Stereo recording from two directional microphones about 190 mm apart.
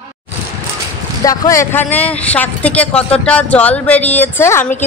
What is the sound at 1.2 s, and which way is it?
Speech, 20° left (ahead or behind).